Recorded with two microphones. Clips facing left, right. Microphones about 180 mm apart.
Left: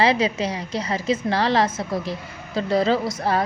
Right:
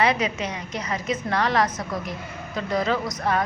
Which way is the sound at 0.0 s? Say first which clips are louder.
Left 3 dB; 30° left (ahead or behind).